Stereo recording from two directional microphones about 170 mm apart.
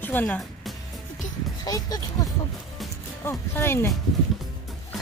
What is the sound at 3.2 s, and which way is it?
Speech, 15° left (ahead or behind).